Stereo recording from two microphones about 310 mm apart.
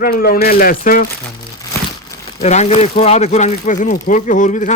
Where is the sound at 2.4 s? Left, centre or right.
Left.